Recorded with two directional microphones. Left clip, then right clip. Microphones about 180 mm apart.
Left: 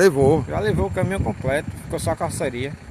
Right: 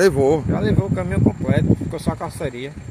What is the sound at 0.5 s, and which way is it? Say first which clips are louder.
Speech: even; 50° left (ahead or behind).